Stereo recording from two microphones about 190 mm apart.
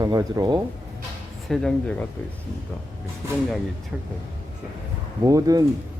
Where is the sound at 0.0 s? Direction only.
20° right (ahead or behind).